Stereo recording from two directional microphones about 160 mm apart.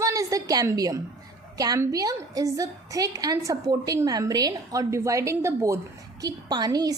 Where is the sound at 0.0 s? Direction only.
20° right (ahead or behind).